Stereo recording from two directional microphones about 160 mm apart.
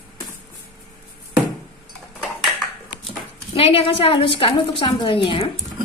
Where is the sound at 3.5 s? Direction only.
35° left (ahead or behind).